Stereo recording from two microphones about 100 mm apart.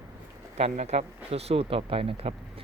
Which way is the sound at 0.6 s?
90° right.